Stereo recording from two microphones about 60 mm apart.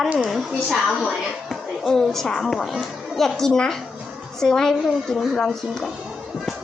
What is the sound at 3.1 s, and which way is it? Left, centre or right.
A woman's voice, centre.